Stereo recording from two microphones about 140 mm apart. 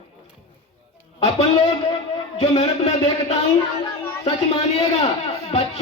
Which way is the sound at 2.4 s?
50° left (ahead or behind).